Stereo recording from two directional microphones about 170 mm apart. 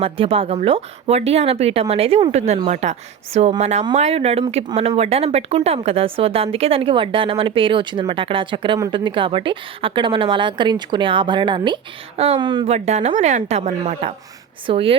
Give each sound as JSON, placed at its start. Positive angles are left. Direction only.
{"t": 0.0, "sound": "a woman's voice", "side_deg": -35}
{"t": 12.7, "sound": "speech", "side_deg": -40}
{"t": 14.7, "sound": "speech", "side_deg": -35}